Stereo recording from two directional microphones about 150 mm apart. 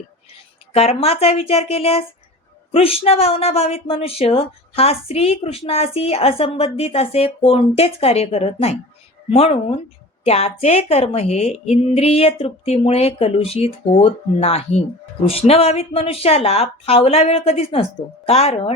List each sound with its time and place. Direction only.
0.7 s a woman's voice: 45° left (ahead or behind)